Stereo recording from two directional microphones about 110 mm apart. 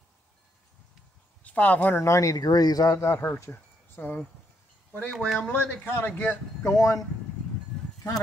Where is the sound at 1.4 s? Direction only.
15° left (ahead or behind).